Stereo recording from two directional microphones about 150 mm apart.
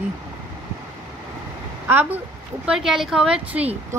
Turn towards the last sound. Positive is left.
turn(degrees=-10)  # may be behind; listen again after turning